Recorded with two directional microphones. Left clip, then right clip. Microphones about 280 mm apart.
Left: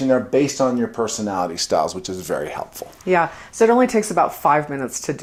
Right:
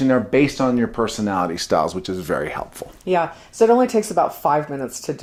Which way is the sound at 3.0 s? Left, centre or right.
Left.